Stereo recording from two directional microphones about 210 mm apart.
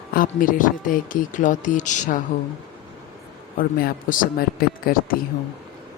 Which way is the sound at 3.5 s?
40° left (ahead or behind).